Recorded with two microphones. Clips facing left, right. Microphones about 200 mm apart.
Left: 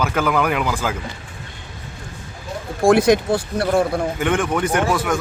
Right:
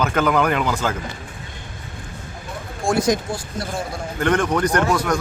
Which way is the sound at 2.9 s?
60° left (ahead or behind).